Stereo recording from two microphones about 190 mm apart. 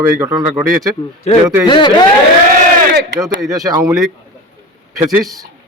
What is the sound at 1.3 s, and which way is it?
Speech, 35° left (ahead or behind).